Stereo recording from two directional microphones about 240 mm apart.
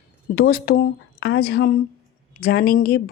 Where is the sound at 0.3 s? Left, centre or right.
Left.